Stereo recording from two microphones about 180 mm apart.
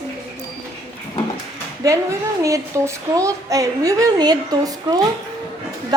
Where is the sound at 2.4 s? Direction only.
15° right (ahead or behind).